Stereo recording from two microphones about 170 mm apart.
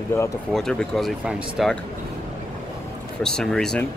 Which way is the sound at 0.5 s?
5° left (ahead or behind).